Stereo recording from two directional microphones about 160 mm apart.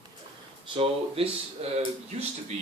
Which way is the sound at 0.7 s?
35° right (ahead or behind).